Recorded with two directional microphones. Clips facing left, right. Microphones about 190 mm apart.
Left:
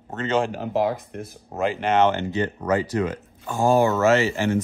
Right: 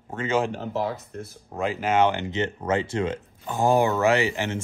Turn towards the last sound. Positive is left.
turn(degrees=-20)  # may be behind; listen again after turning